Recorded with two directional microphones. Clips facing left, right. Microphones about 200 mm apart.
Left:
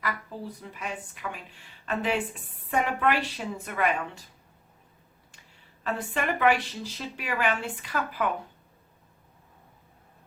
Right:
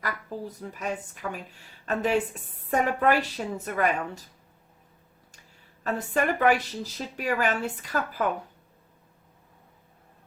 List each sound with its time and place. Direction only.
0.0 s speech: 40° right (ahead or behind)
5.8 s speech: 40° right (ahead or behind)